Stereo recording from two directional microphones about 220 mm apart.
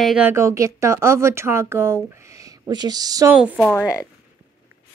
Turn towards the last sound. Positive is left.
turn(degrees=15)  # may be behind; listen again after turning